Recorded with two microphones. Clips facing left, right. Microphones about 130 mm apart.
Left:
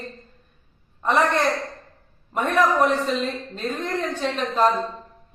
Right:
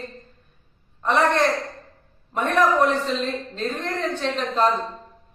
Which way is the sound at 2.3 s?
5° left (ahead or behind).